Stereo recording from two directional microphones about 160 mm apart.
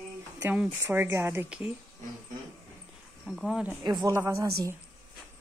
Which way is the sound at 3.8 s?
25° right (ahead or behind).